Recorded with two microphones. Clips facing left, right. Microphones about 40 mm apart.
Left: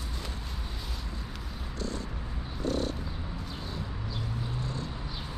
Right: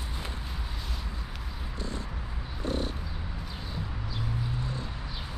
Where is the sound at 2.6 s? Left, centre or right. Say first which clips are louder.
Left 1 dB; right.